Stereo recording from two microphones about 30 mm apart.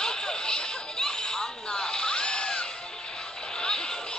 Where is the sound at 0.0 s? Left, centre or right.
Left.